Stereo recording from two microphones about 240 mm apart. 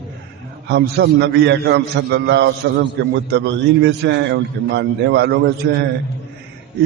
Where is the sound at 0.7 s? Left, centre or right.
Right.